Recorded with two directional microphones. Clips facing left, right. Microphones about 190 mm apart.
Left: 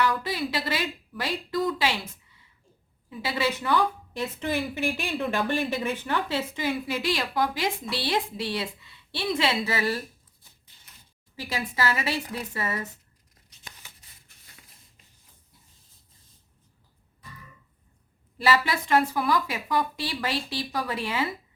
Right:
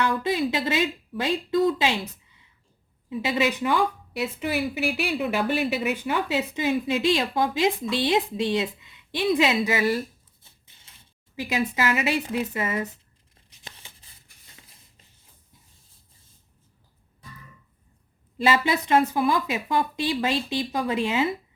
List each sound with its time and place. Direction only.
0.0 s speech: 20° right (ahead or behind)
3.1 s a woman's voice: 20° right (ahead or behind)
11.3 s a woman's voice: 20° right (ahead or behind)
13.3 s tearing: 25° right (ahead or behind)
18.3 s speech: 20° right (ahead or behind)